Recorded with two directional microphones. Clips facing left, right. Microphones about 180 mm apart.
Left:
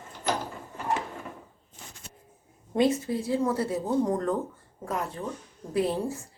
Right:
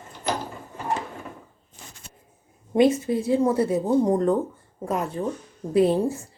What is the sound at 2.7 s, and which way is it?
Speech, 20° right (ahead or behind).